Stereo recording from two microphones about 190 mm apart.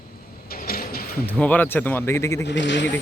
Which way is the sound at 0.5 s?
50° left (ahead or behind).